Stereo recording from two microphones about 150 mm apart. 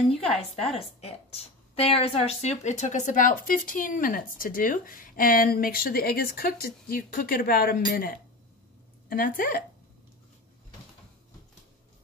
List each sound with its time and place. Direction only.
0.7 s a woman's voice: 45° left (ahead or behind); by 8.1 s 70° left (ahead or behind)
9.1 s a woman's voice: 75° left (ahead or behind)